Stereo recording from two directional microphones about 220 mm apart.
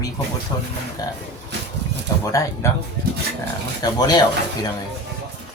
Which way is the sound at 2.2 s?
15° left (ahead or behind).